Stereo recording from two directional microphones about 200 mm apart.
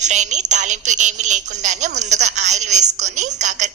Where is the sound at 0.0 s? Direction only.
35° right (ahead or behind).